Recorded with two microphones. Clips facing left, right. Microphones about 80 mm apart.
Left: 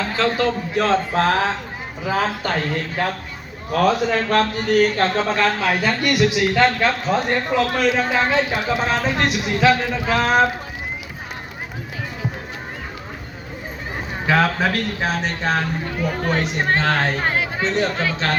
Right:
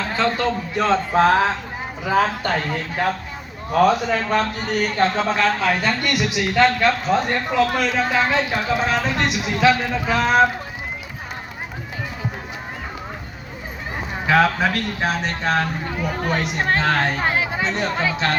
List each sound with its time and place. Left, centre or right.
0.2 s a man's voice: centre
14.3 s a man's voice: centre